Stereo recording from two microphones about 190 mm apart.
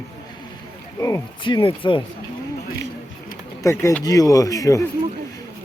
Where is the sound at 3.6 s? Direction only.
15° left (ahead or behind).